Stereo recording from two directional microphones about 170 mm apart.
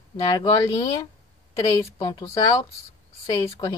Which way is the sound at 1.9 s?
25° left (ahead or behind).